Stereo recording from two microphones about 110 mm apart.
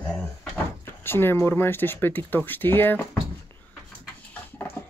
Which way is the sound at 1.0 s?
20° left (ahead or behind).